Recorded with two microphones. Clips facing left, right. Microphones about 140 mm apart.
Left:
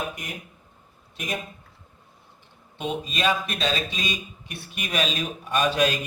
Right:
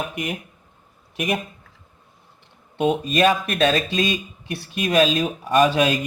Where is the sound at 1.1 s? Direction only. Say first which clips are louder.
Right 8 dB; 70° right (ahead or behind).